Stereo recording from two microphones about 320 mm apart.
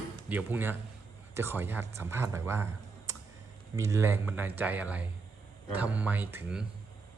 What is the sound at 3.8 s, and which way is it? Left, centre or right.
Speech, centre.